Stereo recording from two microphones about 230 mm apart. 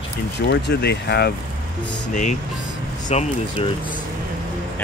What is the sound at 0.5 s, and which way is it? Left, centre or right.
Speech, left.